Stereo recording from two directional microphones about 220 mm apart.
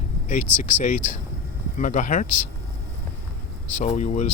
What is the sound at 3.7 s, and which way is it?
Speech, 35° left (ahead or behind).